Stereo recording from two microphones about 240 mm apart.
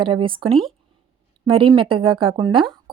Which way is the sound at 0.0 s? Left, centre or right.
Right.